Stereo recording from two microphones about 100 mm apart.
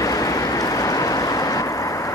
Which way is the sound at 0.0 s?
35° left (ahead or behind).